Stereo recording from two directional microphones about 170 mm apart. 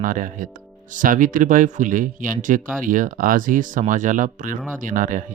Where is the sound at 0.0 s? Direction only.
50° right (ahead or behind).